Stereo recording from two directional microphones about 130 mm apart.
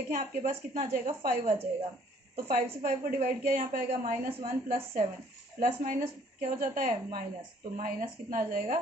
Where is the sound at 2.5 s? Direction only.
90° right.